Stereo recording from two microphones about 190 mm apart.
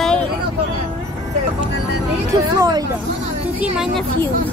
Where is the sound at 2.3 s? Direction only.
20° right (ahead or behind).